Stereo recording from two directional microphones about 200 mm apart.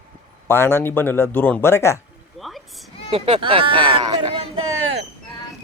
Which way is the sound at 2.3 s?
Centre (ahead or behind).